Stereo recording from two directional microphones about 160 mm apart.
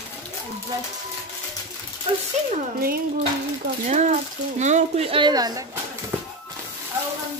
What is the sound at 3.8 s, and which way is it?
Speech, 50° right (ahead or behind).